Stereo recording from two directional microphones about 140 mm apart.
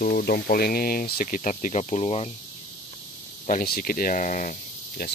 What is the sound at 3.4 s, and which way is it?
Speech, 75° left (ahead or behind).